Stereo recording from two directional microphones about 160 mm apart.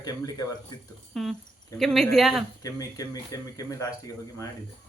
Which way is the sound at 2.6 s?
20° left (ahead or behind).